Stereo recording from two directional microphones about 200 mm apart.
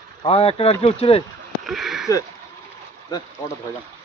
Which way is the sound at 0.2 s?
30° left (ahead or behind).